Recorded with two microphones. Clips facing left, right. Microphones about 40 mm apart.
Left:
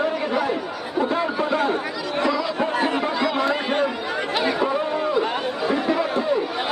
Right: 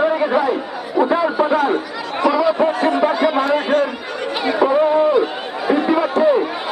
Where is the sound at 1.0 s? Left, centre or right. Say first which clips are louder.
Right 6 dB; centre.